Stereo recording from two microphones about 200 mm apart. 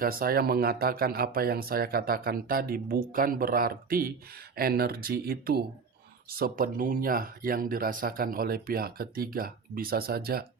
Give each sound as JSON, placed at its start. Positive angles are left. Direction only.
{"t": 0.0, "sound": "speech", "side_deg": -45}